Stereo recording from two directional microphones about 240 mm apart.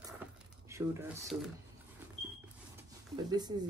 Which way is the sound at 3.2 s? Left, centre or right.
Centre.